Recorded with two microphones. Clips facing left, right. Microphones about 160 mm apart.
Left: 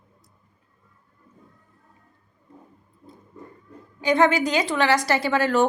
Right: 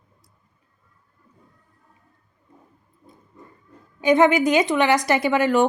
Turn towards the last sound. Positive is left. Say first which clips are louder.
# right 2 dB
turn(degrees=-15)  # may be behind; listen again after turning